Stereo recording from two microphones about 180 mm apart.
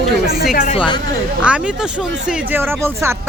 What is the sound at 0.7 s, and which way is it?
Speech, 25° left (ahead or behind).